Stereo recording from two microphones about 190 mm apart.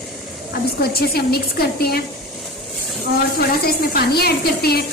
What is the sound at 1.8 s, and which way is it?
Speech, 55° left (ahead or behind).